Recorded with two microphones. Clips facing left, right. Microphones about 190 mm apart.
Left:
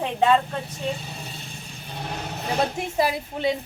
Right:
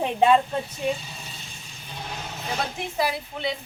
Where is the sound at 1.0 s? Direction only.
55° left (ahead or behind).